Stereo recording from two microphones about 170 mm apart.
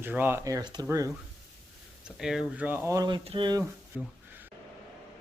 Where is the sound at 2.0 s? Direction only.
Centre (ahead or behind); by 3.6 s 25° right (ahead or behind).